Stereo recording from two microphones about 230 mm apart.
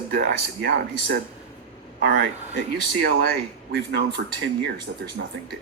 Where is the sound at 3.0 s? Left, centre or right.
Right.